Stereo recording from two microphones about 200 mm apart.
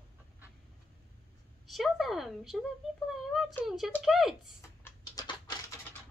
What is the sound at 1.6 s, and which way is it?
Speech, centre (ahead or behind).